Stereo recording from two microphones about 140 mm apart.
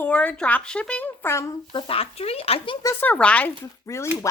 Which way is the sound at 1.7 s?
40° left (ahead or behind).